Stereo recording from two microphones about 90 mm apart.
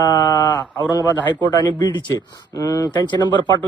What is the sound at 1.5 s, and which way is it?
Speech, 55° left (ahead or behind).